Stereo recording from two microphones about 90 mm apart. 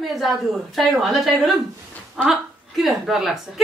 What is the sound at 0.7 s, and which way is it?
A woman's voice, centre (ahead or behind).